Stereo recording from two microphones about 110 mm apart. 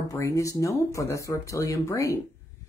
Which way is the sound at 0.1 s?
25° left (ahead or behind).